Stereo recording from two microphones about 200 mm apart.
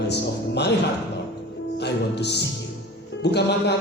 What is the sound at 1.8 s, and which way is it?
Speech, 55° left (ahead or behind).